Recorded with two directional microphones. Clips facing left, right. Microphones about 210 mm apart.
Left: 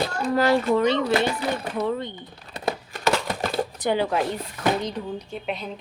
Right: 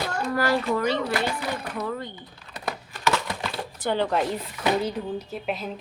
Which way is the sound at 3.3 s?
45° left (ahead or behind).